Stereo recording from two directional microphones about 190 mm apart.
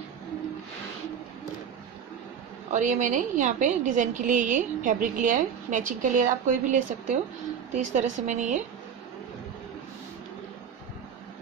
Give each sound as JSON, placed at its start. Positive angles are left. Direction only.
{"t": 2.7, "sound": "a woman's voice", "side_deg": -40}